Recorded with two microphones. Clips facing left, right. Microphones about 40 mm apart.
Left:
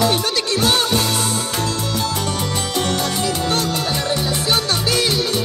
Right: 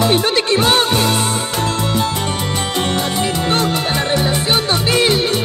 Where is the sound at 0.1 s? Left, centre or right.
Right.